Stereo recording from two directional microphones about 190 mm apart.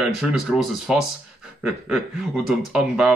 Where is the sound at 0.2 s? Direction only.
Centre (ahead or behind).